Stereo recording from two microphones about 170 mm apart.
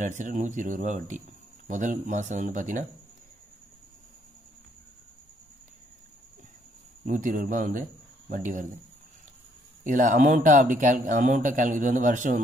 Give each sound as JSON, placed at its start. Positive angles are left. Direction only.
{"t": 0.0, "sound": "speech", "side_deg": -45}
{"t": 7.1, "sound": "speech", "side_deg": -50}
{"t": 9.8, "sound": "speech", "side_deg": -50}